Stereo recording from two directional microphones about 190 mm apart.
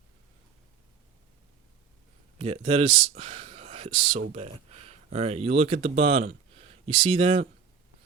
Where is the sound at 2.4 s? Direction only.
35° right (ahead or behind).